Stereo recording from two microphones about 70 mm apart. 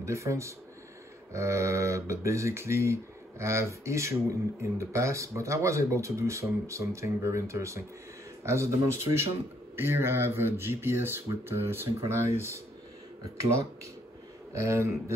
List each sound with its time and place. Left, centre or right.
0.0 s speech: right
14.5 s speech: right